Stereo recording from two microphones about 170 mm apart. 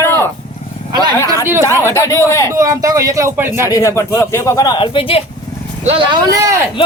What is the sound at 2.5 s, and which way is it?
Speech, 20° right (ahead or behind).